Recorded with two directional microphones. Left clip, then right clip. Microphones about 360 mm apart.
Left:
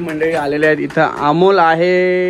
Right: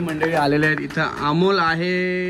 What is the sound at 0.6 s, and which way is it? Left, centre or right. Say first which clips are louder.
Speech: left 8 dB; centre.